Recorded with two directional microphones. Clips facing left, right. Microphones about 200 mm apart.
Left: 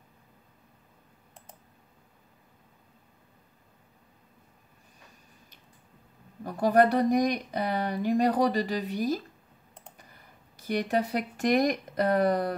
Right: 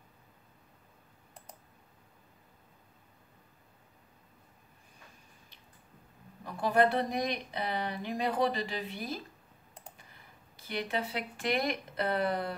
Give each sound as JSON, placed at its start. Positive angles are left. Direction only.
{"t": 6.6, "sound": "speech", "side_deg": 45}
{"t": 10.7, "sound": "speech", "side_deg": 45}